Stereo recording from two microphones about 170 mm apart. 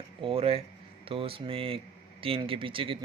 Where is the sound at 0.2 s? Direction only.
35° right (ahead or behind).